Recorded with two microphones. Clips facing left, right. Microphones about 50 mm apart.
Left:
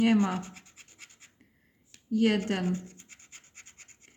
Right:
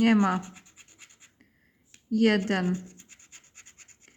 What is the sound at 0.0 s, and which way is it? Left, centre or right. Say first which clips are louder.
Speech: right 3 dB; right.